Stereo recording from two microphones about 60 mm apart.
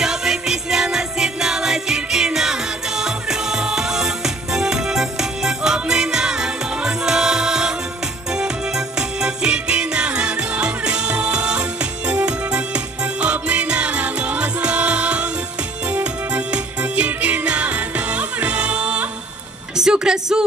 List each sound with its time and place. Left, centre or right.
0.0 s music: centre